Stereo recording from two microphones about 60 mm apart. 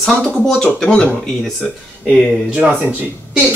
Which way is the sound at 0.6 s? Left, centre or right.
Centre.